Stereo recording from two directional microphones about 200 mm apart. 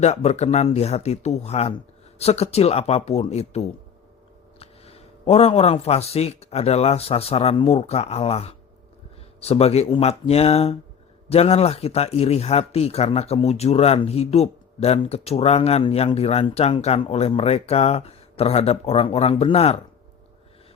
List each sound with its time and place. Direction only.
0.0 s speech: 35° left (ahead or behind)